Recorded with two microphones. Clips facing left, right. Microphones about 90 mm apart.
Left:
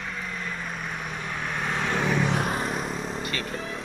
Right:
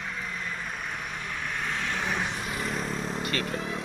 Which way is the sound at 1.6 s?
45° left (ahead or behind).